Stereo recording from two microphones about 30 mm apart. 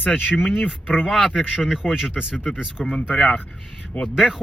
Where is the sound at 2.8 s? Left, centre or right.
Centre.